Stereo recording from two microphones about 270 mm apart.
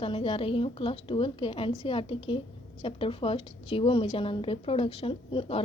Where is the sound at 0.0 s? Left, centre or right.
Centre.